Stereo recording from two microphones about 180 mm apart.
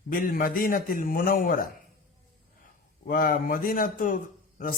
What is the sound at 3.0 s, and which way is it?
Speech, 50° left (ahead or behind).